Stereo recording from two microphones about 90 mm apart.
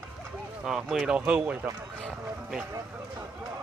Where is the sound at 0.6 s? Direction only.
5° right (ahead or behind).